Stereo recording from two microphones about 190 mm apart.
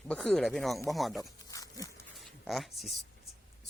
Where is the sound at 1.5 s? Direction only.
15° left (ahead or behind).